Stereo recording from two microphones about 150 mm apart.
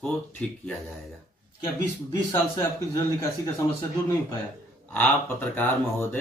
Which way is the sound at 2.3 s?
20° left (ahead or behind).